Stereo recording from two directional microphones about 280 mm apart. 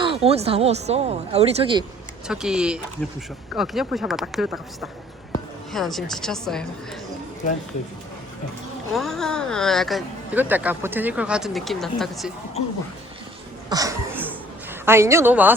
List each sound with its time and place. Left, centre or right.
0.0 s speech: centre
2.2 s speech: centre
8.9 s speech: centre
13.7 s a sound: centre
14.7 s a woman's voice: centre